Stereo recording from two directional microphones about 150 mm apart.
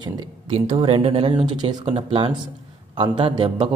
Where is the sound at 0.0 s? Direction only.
30° right (ahead or behind).